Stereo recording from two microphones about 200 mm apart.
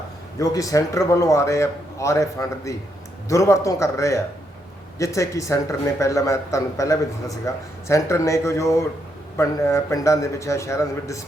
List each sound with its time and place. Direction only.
0.3 s speech: 15° left (ahead or behind)